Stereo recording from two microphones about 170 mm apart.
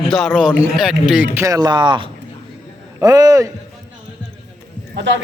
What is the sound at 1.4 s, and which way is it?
Speech, 20° right (ahead or behind).